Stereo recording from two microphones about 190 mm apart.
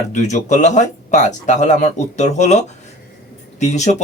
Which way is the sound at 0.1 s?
40° left (ahead or behind).